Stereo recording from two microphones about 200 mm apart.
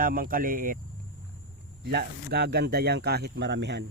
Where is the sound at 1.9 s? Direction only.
55° right (ahead or behind).